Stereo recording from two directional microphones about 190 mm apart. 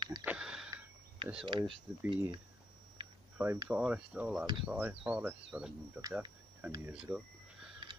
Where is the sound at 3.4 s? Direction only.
10° right (ahead or behind).